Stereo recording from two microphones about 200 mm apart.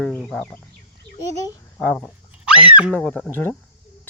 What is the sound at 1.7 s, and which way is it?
Speech, 5° left (ahead or behind).